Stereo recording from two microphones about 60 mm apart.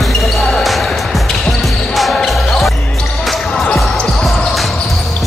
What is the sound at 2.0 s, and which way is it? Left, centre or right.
Basketball bounce, centre.